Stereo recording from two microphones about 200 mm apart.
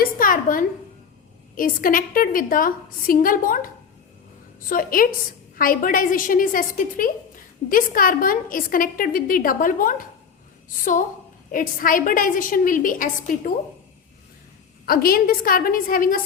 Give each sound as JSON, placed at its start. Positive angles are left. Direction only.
{"t": 0.0, "sound": "a sound", "side_deg": 45}
{"t": 1.5, "sound": "a woman's voice", "side_deg": 45}
{"t": 4.7, "sound": "a woman's voice", "side_deg": 45}
{"t": 11.5, "sound": "a woman's voice", "side_deg": 45}
{"t": 14.8, "sound": "a woman's voice", "side_deg": 45}